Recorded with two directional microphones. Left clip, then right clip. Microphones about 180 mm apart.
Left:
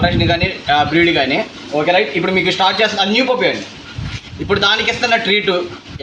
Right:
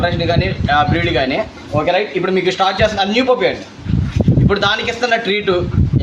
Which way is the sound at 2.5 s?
15° right (ahead or behind).